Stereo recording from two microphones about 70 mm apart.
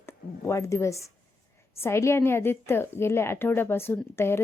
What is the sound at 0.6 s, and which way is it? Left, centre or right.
A woman's voice, left.